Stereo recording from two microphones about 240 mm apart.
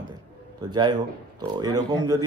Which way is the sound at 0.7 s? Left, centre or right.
Centre.